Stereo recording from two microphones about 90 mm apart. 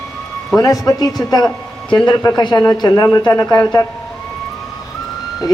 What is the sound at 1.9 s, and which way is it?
A man's voice, 55° left (ahead or behind).